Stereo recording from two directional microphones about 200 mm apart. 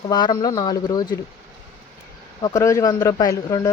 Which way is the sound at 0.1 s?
20° left (ahead or behind).